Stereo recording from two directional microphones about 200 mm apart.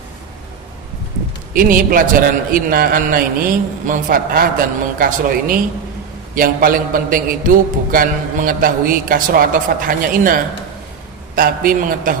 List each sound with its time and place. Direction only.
1.5 s a man's voice: 45° right (ahead or behind)